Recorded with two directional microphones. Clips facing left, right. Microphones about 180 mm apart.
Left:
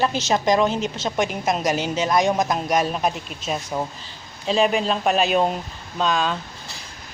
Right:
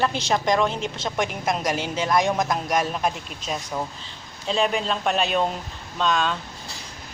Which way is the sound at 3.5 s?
15° left (ahead or behind).